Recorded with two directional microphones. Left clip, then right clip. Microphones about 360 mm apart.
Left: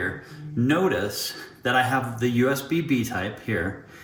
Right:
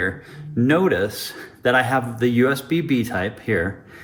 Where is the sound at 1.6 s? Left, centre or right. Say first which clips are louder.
Right 4 dB; centre.